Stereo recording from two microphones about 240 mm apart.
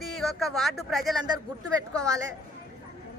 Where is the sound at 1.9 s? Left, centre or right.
Centre.